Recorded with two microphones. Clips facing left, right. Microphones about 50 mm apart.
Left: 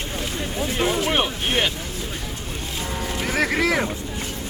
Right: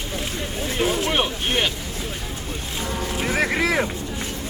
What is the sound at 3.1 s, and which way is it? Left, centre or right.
Speech, centre.